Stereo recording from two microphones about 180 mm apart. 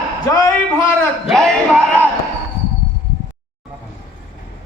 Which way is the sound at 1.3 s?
5° left (ahead or behind).